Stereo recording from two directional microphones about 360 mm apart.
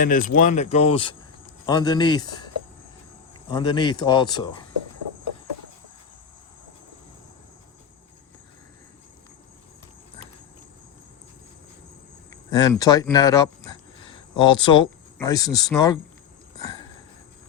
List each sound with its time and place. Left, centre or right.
0.0 s speech: left
3.5 s speech: centre
12.3 s speech: centre